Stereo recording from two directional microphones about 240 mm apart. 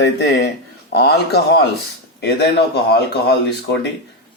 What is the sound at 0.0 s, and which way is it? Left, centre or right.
Speech, left.